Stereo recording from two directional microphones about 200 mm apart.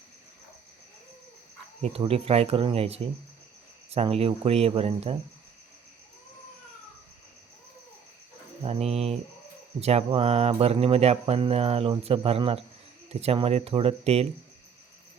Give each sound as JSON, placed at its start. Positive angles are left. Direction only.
{"t": 1.8, "sound": "speech", "side_deg": -30}
{"t": 8.6, "sound": "speech", "side_deg": -30}